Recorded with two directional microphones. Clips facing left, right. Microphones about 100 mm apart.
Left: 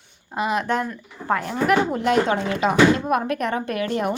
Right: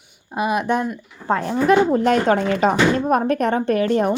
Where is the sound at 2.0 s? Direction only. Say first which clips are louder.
Right 3 dB; 45° right (ahead or behind).